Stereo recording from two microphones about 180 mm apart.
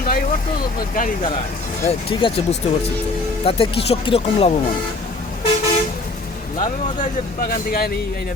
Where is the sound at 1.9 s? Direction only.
30° left (ahead or behind).